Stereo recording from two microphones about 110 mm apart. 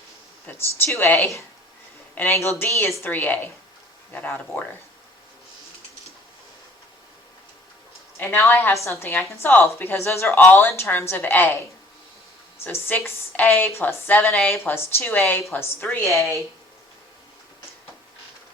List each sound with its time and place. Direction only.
0.5 s a woman's voice: 15° left (ahead or behind)
8.2 s a woman's voice: 20° left (ahead or behind)
12.6 s a woman's voice: 20° left (ahead or behind)
14.3 s a woman's voice: 5° left (ahead or behind)
14.6 s a woman's voice: 20° left (ahead or behind)